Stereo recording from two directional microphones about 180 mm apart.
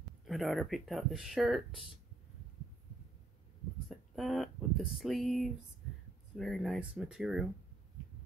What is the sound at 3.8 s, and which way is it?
Speech, centre (ahead or behind).